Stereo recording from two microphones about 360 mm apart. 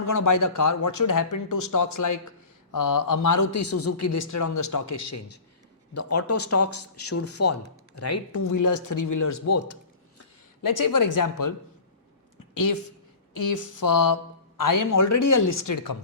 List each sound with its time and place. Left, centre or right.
0.1 s a man's voice: left
10.6 s a woman's voice: left
13.3 s a woman's voice: left